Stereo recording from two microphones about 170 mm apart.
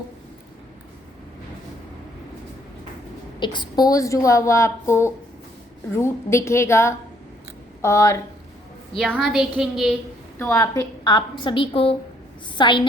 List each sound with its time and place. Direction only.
3.4 s a woman's voice: 25° left (ahead or behind)
9.0 s a woman's voice: centre (ahead or behind)
10.3 s a woman's voice: 15° left (ahead or behind)